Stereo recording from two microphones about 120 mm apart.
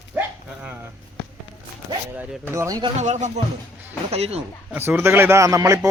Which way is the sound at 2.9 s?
75° right (ahead or behind).